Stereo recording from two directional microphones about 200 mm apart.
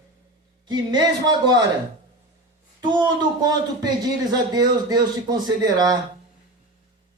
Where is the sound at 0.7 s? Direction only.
20° right (ahead or behind).